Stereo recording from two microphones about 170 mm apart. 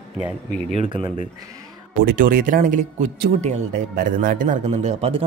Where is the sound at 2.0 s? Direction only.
55° right (ahead or behind).